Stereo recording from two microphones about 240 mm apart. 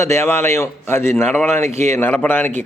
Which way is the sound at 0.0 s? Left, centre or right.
Centre.